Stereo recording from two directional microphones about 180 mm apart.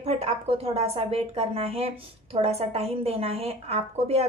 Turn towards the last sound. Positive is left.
turn(degrees=-35)  # may be behind; listen again after turning